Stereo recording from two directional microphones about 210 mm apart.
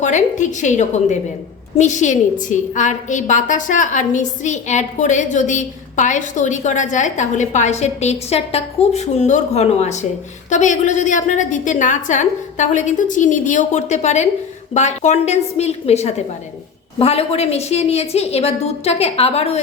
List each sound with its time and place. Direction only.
0.0 s a woman's voice: 35° left (ahead or behind)